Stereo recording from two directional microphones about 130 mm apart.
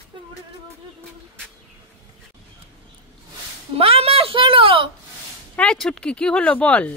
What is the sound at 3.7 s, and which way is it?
A woman's voice, 50° right (ahead or behind).